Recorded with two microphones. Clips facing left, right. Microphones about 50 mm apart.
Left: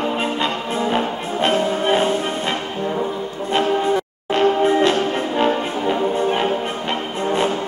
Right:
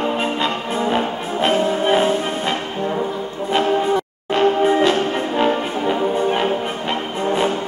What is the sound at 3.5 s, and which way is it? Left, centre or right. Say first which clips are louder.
Music: right 1 dB; centre.